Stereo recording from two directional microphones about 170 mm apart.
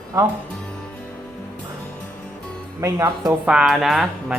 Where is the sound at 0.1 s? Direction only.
20° right (ahead or behind).